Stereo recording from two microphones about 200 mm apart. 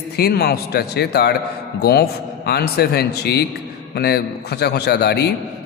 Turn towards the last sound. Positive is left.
turn(degrees=55)  # may be behind; listen again after turning